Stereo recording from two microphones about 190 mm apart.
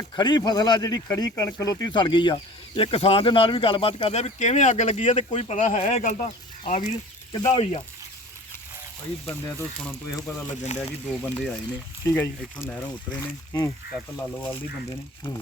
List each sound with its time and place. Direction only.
0.2 s speech: 20° left (ahead or behind); by 6.8 s 40° left (ahead or behind)
7.3 s speech: 20° left (ahead or behind)
7.6 s speech: 30° left (ahead or behind)
9.8 s speech: 15° left (ahead or behind)